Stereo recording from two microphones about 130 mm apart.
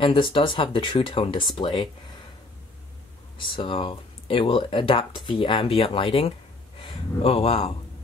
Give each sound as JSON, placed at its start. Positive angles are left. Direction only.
{"t": 0.0, "sound": "speech", "side_deg": 45}
{"t": 3.3, "sound": "speech", "side_deg": 40}